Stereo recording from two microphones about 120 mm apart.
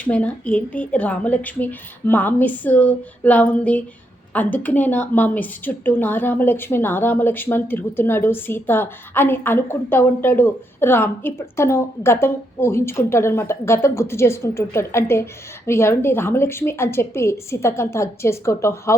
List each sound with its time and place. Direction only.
0.0 s a woman's voice: 10° left (ahead or behind)